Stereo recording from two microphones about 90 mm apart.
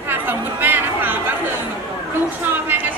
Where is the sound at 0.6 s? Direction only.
20° right (ahead or behind).